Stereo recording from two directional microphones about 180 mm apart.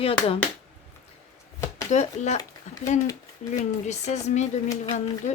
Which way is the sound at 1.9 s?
40° left (ahead or behind).